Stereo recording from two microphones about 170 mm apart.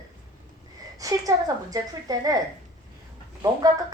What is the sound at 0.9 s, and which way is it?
Speech, 20° right (ahead or behind).